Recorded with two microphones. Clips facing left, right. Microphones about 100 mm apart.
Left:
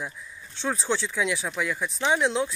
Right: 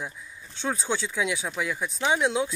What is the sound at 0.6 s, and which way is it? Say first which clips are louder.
Speech: left 1 dB; centre (ahead or behind).